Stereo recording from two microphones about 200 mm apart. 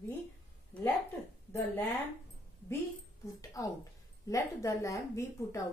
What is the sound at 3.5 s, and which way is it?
A woman's voice, 15° left (ahead or behind).